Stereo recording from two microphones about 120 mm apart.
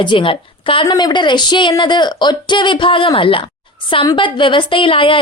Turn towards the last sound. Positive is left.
turn(degrees=45)  # may be behind; listen again after turning